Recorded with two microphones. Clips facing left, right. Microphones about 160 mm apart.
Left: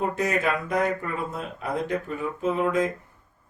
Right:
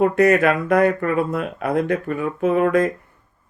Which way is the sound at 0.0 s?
65° right (ahead or behind).